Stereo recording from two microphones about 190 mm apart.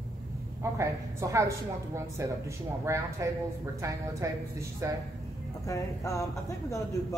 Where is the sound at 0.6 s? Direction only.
15° right (ahead or behind).